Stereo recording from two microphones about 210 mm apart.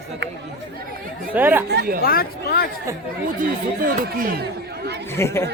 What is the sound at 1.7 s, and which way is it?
Speech, 50° right (ahead or behind).